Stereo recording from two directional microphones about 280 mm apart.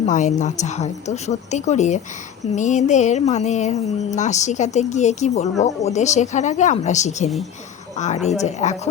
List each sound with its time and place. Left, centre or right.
0.0 s speech: left